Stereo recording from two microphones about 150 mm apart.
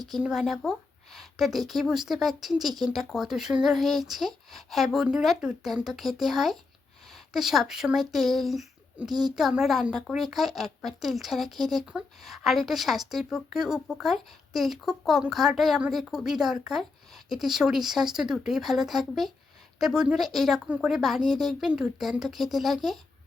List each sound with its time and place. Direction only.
0.0 s speech: centre (ahead or behind)